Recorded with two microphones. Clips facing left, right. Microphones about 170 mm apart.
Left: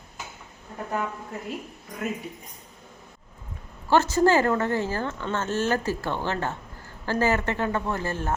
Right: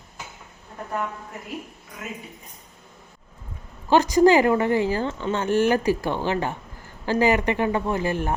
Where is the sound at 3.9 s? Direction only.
15° right (ahead or behind).